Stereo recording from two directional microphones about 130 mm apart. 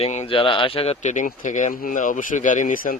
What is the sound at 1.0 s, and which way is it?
Speech, 70° left (ahead or behind).